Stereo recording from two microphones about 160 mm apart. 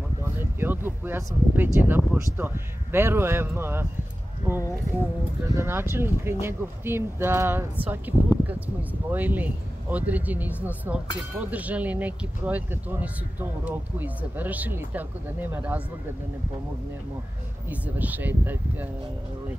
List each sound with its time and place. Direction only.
0.2 s speech: 15° right (ahead or behind)
5.4 s speech: 15° right (ahead or behind)
17.6 s speech: 10° right (ahead or behind)